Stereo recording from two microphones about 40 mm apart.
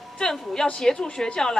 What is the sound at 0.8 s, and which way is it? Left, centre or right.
Speech, centre.